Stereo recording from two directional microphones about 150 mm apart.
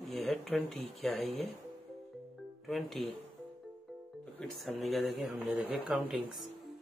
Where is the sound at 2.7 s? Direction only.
Centre (ahead or behind).